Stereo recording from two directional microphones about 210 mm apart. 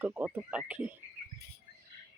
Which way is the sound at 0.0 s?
10° right (ahead or behind).